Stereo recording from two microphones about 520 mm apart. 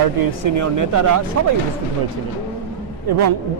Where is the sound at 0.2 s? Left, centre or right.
Right.